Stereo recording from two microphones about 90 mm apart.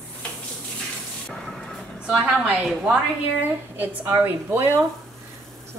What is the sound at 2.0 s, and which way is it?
Speech, 10° right (ahead or behind).